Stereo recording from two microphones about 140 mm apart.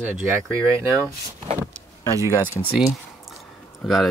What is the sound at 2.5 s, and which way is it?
Speech, 20° left (ahead or behind).